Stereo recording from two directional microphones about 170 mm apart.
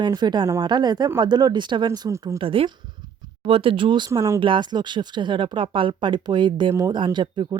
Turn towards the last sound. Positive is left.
turn(degrees=-25)  # may be behind; listen again after turning